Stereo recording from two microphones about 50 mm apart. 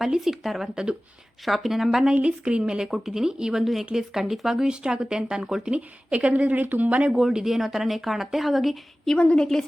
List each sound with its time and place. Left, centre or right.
0.0 s speech: centre
2.1 s speech: right
7.1 s speech: centre
9.1 s a woman's voice: left